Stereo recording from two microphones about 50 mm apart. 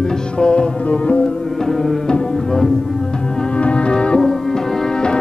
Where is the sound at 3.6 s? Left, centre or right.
Left.